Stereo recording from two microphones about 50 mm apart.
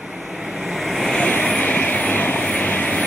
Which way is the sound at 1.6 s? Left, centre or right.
Left.